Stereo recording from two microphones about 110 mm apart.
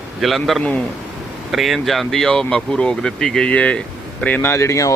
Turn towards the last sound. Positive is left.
turn(degrees=30)  # may be behind; listen again after turning